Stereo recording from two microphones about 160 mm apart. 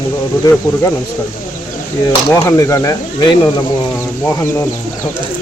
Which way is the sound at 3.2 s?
30° left (ahead or behind).